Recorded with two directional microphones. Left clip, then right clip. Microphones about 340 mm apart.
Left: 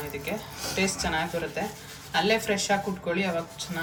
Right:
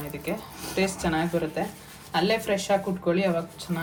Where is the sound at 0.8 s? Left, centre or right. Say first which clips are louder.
Right 2 dB; centre.